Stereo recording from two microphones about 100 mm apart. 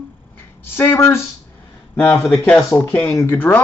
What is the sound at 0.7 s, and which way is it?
Speech, 25° left (ahead or behind).